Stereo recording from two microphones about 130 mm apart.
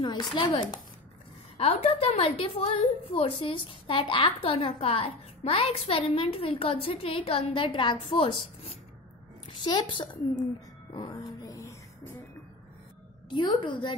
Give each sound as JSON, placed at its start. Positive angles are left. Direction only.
{"t": 0.0, "sound": "a woman's voice", "side_deg": 35}
{"t": 1.6, "sound": "a woman's voice", "side_deg": 50}
{"t": 10.9, "sound": "music", "side_deg": 35}
{"t": 13.3, "sound": "a woman's voice", "side_deg": 35}